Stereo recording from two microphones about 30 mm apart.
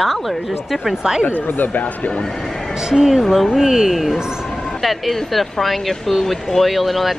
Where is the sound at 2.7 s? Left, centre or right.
Right.